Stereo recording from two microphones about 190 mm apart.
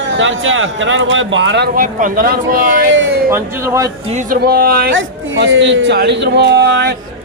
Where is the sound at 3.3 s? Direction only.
15° right (ahead or behind).